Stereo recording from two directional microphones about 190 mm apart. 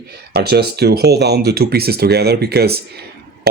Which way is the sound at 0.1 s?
60° right (ahead or behind).